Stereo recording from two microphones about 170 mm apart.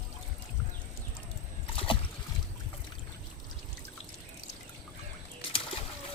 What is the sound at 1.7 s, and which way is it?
Boat, 30° left (ahead or behind).